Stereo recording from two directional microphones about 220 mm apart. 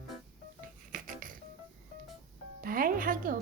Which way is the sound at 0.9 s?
35° right (ahead or behind).